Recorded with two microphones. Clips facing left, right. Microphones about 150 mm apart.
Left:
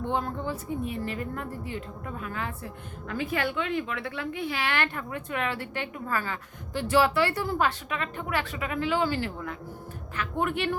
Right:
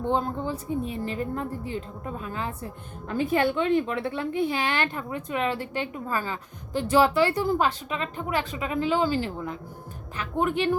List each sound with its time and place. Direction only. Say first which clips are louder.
0.1 s a woman's voice: right 4 dB; 25° right (ahead or behind)